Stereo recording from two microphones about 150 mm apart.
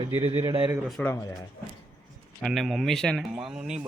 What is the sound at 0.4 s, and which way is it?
Speech, 25° right (ahead or behind).